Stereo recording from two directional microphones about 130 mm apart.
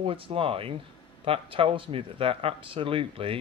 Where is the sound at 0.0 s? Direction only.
45° right (ahead or behind).